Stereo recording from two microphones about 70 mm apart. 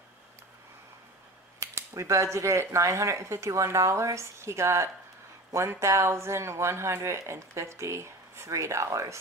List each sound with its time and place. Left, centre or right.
1.6 s speech: right